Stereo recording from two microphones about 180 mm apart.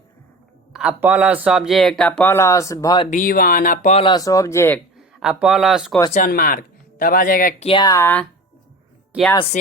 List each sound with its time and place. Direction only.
0.7 s speech: 5° right (ahead or behind); by 3.1 s 20° left (ahead or behind)
3.1 s speech: 50° left (ahead or behind)
3.9 s speech: 25° left (ahead or behind)
4.9 s speech: 5° right (ahead or behind)
6.1 s speech: 50° left (ahead or behind)
7.6 s speech: 25° left (ahead or behind); by 8.3 s 10° left (ahead or behind)